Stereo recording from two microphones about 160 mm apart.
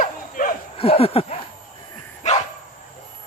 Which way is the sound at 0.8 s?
35° left (ahead or behind).